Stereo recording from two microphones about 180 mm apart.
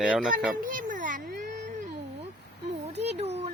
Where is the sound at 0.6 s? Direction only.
45° right (ahead or behind).